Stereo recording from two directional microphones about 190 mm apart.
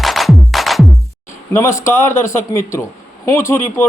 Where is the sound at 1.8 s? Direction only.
15° left (ahead or behind).